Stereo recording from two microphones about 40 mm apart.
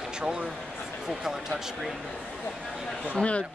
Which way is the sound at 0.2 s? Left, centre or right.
Right.